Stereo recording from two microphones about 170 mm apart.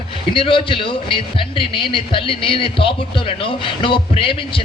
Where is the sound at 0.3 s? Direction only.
30° left (ahead or behind).